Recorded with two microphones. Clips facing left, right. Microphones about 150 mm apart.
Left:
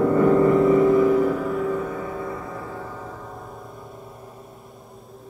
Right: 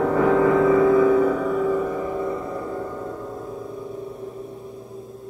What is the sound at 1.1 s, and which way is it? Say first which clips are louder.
Music: right 2 dB; centre (ahead or behind).